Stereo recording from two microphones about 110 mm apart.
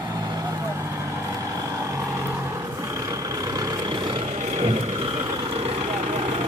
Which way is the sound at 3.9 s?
55° right (ahead or behind).